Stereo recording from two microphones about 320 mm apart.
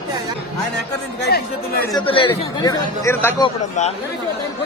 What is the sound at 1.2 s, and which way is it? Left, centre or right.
Speech, left.